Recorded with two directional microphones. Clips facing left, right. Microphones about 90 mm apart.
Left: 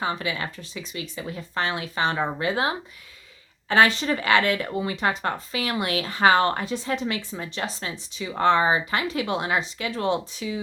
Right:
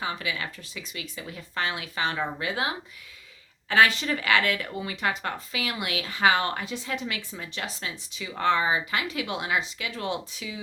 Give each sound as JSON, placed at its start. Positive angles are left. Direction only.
{"t": 0.0, "sound": "speech", "side_deg": 35}